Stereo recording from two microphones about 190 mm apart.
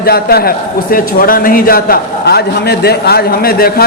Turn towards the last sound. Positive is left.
turn(degrees=50)  # may be behind; listen again after turning